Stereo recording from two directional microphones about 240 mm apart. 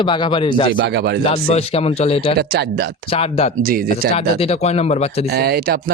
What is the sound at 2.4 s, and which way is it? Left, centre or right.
Speech, right.